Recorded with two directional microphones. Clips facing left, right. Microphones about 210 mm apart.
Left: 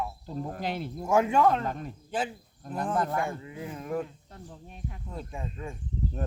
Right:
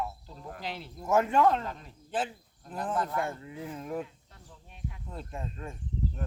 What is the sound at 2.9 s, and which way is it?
Speech, 50° left (ahead or behind).